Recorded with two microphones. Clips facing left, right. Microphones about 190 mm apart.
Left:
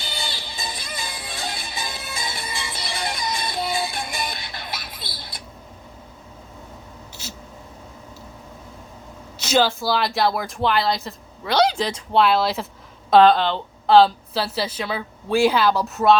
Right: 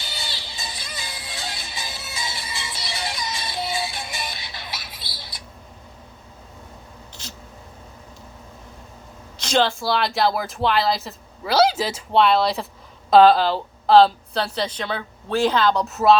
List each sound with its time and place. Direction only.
0.1 s music: 55° left (ahead or behind)
9.4 s a woman's voice: 5° left (ahead or behind)